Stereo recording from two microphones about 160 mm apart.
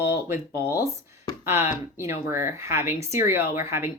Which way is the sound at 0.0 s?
15° right (ahead or behind).